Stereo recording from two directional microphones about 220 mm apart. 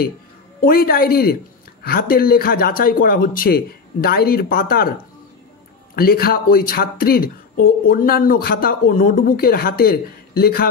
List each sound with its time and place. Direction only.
0.6 s speech: 40° left (ahead or behind)
5.9 s speech: 45° left (ahead or behind)